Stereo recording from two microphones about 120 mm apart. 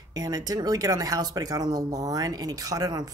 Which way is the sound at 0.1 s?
30° right (ahead or behind).